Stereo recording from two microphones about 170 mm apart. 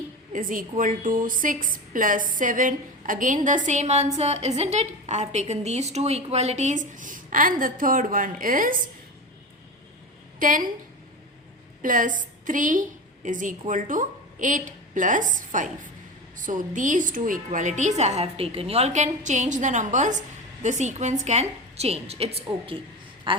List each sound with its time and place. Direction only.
0.3 s a woman's voice: 55° right (ahead or behind)
10.4 s a woman's voice: 50° right (ahead or behind)
11.8 s a woman's voice: 50° right (ahead or behind); by 23.4 s 30° right (ahead or behind)